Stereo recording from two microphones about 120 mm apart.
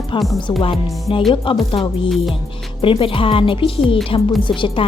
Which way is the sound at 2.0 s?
Centre (ahead or behind).